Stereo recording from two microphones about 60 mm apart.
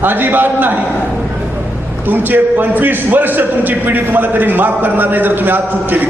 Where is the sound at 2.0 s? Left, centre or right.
Right.